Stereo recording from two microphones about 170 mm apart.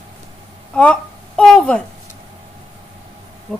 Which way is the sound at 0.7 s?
5° left (ahead or behind).